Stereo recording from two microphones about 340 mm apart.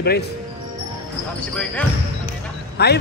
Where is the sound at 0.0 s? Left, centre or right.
Left.